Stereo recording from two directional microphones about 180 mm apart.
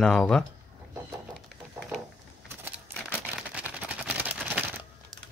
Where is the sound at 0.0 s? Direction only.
5° left (ahead or behind).